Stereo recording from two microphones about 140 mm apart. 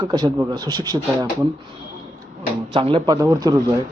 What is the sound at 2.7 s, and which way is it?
Speech, 35° right (ahead or behind).